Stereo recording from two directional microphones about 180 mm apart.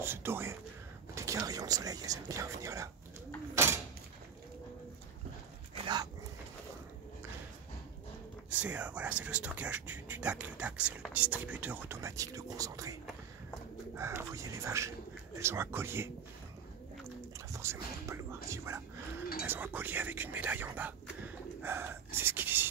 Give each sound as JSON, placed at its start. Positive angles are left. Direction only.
{"t": 0.0, "sound": "speech", "side_deg": -15}
{"t": 3.5, "sound": "a sound", "side_deg": -15}
{"t": 8.5, "sound": "speech", "side_deg": -5}
{"t": 13.9, "sound": "speech", "side_deg": -15}
{"t": 17.5, "sound": "music", "side_deg": -15}
{"t": 19.4, "sound": "speech", "side_deg": -10}
{"t": 21.6, "sound": "gasp", "side_deg": -10}